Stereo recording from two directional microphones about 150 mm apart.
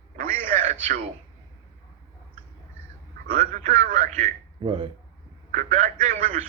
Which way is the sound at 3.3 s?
55° right (ahead or behind).